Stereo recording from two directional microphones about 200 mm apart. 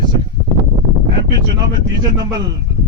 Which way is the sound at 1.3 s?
20° right (ahead or behind).